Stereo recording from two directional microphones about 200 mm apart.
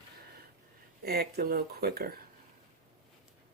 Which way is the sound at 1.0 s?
50° right (ahead or behind).